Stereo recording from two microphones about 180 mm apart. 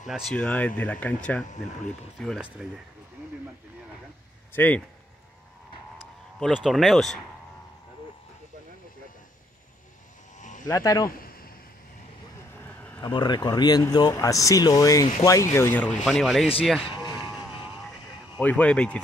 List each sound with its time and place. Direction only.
0.0 s speech: centre (ahead or behind)
4.6 s speech: 10° left (ahead or behind)
6.4 s speech: centre (ahead or behind)
10.7 s speech: 15° left (ahead or behind)
12.6 s a sound: 10° left (ahead or behind)
13.0 s speech: 25° left (ahead or behind); by 16.4 s centre (ahead or behind)
18.4 s speech: 10° left (ahead or behind)